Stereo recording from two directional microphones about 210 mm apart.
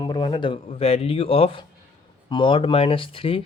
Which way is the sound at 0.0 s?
20° left (ahead or behind).